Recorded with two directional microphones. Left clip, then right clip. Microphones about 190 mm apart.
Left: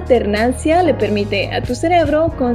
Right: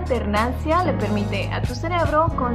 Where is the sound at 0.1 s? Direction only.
20° left (ahead or behind).